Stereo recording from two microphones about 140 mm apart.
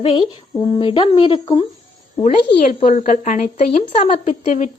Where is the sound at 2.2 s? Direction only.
65° left (ahead or behind).